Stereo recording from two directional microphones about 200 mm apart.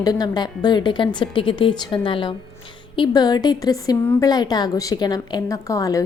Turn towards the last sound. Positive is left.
turn(degrees=15)  # may be behind; listen again after turning